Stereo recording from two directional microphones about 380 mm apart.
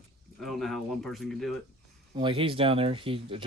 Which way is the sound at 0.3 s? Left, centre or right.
Centre.